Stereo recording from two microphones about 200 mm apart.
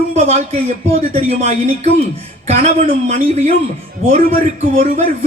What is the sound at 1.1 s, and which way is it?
A man's voice, 35° right (ahead or behind).